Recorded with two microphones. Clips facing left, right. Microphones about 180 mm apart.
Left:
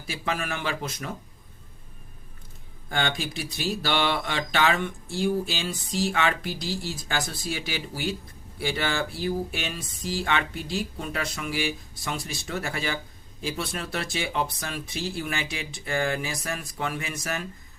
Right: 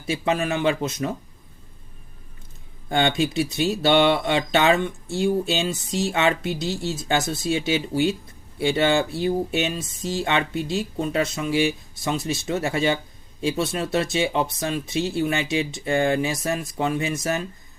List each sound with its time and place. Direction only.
0.1 s speech: 25° right (ahead or behind)
2.9 s speech: 25° right (ahead or behind)